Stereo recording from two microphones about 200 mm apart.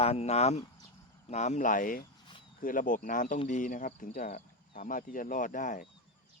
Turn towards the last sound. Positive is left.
turn(degrees=40)  # may be behind; listen again after turning